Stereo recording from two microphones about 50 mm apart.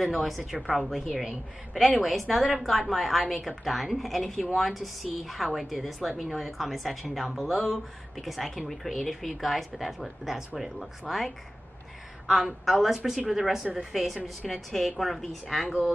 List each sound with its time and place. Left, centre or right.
0.1 s a woman's voice: centre